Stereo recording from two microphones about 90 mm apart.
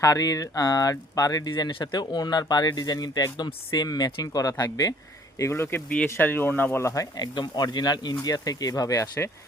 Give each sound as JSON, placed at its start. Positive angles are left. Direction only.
{"t": 0.0, "sound": "speech", "side_deg": 40}
{"t": 1.5, "sound": "speech", "side_deg": 50}
{"t": 5.4, "sound": "speech", "side_deg": 30}
{"t": 6.8, "sound": "speech", "side_deg": 40}
{"t": 7.3, "sound": "speech", "side_deg": 55}